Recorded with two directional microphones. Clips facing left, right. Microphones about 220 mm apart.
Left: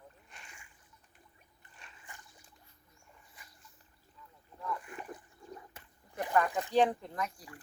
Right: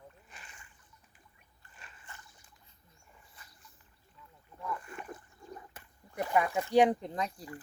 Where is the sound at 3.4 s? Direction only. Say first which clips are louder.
Even; 15° left (ahead or behind).